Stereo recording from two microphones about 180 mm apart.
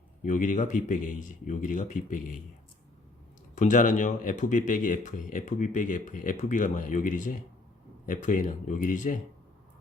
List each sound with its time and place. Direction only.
0.2 s speech: 45° left (ahead or behind)
3.5 s speech: 45° left (ahead or behind)